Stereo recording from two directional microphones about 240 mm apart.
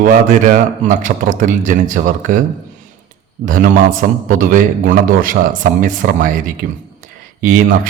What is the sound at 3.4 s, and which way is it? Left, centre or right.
A man's voice, right.